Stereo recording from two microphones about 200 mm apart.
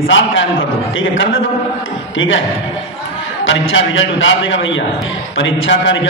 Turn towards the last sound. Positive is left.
turn(degrees=70)  # may be behind; listen again after turning